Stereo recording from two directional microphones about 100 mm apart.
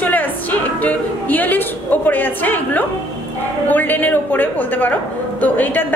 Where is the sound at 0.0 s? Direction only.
15° left (ahead or behind).